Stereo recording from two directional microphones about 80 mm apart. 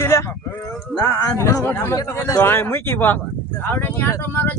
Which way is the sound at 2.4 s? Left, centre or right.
Left.